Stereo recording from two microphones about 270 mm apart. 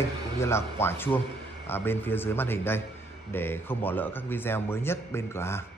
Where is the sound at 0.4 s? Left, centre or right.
Centre.